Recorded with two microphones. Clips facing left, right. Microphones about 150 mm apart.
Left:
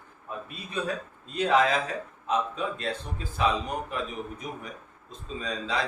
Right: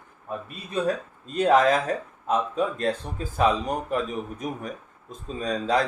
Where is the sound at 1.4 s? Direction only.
45° right (ahead or behind).